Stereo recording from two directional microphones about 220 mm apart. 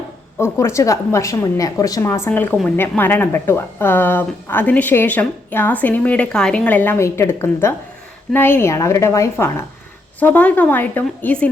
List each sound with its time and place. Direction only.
0.3 s speech: 10° left (ahead or behind)